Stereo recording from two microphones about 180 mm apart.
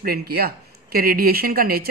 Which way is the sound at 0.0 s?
60° right (ahead or behind).